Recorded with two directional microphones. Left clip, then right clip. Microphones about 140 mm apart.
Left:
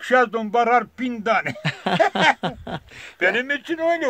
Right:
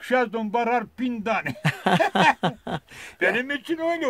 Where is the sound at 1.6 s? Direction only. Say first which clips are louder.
Right 1 dB; 35° right (ahead or behind).